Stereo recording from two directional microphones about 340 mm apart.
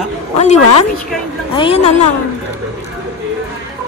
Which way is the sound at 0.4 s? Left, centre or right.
Centre.